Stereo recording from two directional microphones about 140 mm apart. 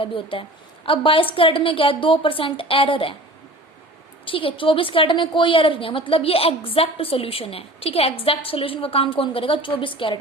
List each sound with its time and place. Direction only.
0.0 s a woman's voice: 40° left (ahead or behind)
4.3 s a woman's voice: 40° left (ahead or behind)